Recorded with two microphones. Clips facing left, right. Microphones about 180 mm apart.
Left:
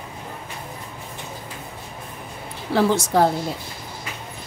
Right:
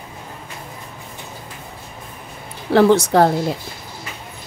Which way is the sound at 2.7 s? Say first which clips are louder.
Right 6 dB; 70° right (ahead or behind).